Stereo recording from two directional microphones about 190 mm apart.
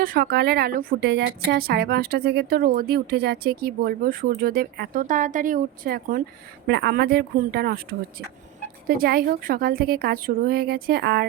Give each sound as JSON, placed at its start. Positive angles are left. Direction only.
{"t": 0.0, "sound": "a woman's voice", "side_deg": -50}
{"t": 6.7, "sound": "a woman's voice", "side_deg": -60}